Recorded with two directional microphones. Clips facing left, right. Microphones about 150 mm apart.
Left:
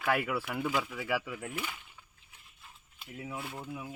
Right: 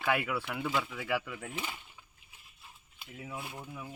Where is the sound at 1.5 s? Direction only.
20° right (ahead or behind).